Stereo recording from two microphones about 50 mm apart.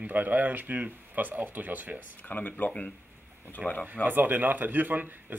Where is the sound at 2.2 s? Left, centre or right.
Left.